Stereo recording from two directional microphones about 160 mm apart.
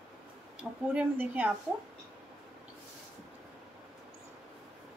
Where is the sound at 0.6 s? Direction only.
10° right (ahead or behind).